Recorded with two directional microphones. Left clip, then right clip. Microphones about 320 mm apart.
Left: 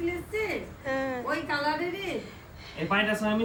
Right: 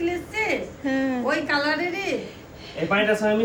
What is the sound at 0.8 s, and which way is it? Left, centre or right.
Speech, centre.